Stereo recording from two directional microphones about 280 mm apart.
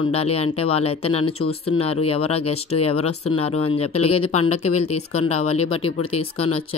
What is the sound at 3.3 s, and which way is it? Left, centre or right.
Speech, left.